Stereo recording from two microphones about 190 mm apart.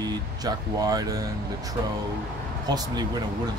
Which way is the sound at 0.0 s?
20° right (ahead or behind).